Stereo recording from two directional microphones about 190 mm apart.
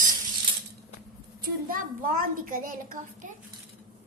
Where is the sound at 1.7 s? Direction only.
45° right (ahead or behind).